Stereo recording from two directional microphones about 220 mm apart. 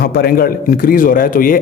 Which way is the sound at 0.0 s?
45° left (ahead or behind).